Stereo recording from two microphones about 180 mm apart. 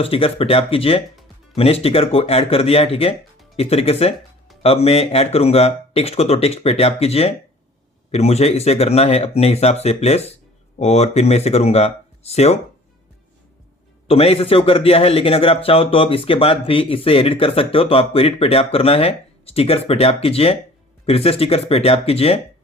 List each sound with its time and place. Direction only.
0.0 s a man's voice: 30° left (ahead or behind)
14.1 s a man's voice: 30° left (ahead or behind)